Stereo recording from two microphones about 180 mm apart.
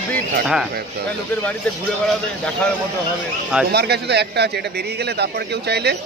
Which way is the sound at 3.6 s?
65° right (ahead or behind).